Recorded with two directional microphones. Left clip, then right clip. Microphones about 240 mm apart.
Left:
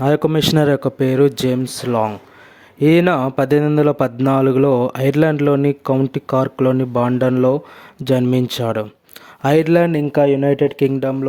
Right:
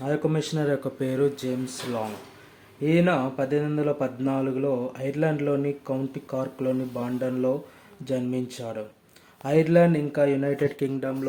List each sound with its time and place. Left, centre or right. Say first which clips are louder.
0.0 s speech: left 11 dB; left